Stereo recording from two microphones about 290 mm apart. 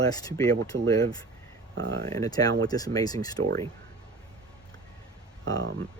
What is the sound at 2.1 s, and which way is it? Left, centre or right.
Speech, centre.